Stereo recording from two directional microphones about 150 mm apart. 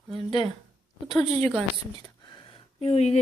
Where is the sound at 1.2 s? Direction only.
45° right (ahead or behind).